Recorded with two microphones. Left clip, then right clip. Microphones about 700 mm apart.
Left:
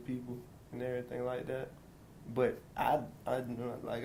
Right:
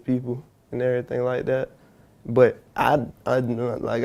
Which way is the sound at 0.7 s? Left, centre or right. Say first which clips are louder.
Right 15 dB; right.